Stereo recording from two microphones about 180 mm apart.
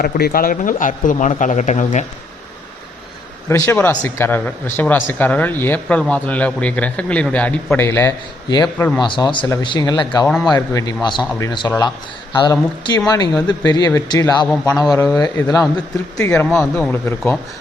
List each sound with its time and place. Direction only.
0.0 s speech: 55° left (ahead or behind); by 2.0 s 40° left (ahead or behind)
3.5 s speech: 10° left (ahead or behind)
9.0 s a man's voice: 25° left (ahead or behind)
16.1 s speech: 10° left (ahead or behind)